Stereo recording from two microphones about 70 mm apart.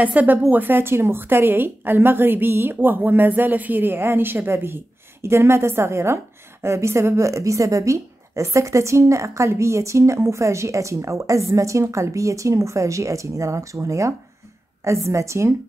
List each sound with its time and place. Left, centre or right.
0.0 s a woman's voice: right